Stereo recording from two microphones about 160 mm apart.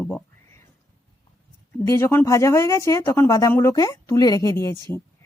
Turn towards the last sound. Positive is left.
turn(degrees=20)  # may be behind; listen again after turning